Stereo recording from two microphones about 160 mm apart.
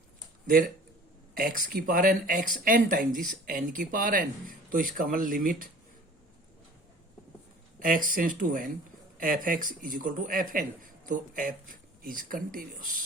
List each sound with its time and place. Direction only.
1.3 s speech: 60° right (ahead or behind)
7.8 s speech: 60° right (ahead or behind)